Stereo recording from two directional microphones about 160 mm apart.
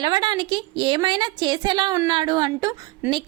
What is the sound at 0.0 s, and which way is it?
A woman's voice, 30° right (ahead or behind).